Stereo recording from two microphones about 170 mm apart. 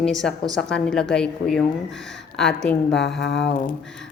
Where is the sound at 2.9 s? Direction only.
90° left.